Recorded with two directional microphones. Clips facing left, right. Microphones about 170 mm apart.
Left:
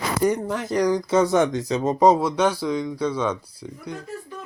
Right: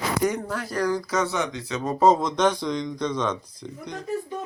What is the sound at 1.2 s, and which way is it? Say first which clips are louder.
Speech: left 8 dB; 50° left (ahead or behind).